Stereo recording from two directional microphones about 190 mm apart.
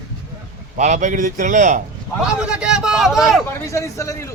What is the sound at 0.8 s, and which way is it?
A man's voice, 40° right (ahead or behind).